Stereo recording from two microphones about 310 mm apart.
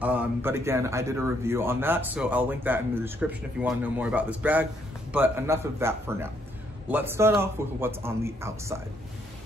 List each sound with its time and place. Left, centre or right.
0.0 s a man's voice: centre